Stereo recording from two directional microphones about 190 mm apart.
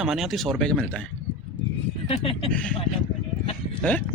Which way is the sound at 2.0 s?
30° left (ahead or behind).